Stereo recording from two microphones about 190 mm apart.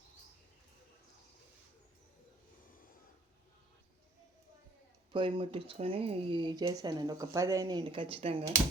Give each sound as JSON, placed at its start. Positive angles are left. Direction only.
{"t": 5.1, "sound": "speech", "side_deg": -25}